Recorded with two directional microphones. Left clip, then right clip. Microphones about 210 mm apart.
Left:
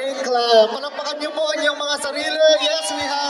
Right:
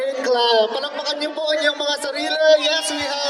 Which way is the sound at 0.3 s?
15° left (ahead or behind).